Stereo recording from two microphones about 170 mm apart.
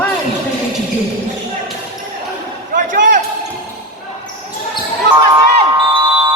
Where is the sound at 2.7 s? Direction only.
50° right (ahead or behind).